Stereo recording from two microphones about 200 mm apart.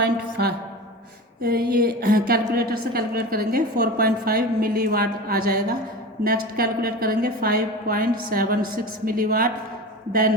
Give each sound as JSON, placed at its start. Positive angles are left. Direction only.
{"t": 0.4, "sound": "a woman's voice", "side_deg": -55}
{"t": 1.4, "sound": "a sound", "side_deg": -50}
{"t": 1.7, "sound": "a woman's voice", "side_deg": -50}